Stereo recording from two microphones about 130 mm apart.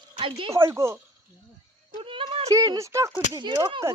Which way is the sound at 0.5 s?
20° right (ahead or behind).